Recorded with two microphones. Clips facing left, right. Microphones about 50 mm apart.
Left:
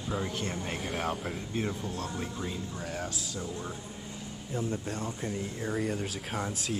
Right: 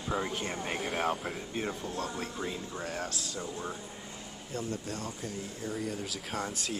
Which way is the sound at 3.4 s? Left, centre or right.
Centre.